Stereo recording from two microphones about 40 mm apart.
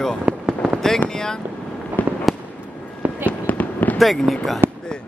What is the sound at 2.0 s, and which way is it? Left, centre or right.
Fireworks, left.